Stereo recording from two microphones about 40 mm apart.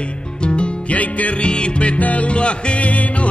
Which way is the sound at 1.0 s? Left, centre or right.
Left.